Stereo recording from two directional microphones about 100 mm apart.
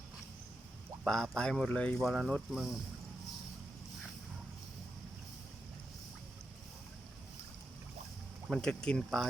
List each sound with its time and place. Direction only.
1.0 s speech: 5° left (ahead or behind)
2.0 s speech: centre (ahead or behind)
8.4 s speech: 5° left (ahead or behind)